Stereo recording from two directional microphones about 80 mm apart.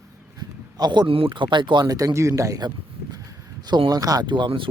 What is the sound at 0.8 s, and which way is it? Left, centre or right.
Speech, right.